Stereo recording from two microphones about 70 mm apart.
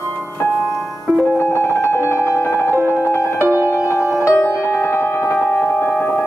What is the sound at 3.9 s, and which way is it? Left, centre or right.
Music, left.